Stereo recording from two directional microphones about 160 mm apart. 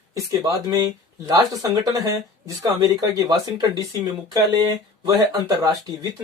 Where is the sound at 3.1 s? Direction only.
25° right (ahead or behind).